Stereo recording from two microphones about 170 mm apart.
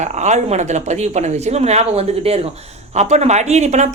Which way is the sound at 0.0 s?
45° right (ahead or behind).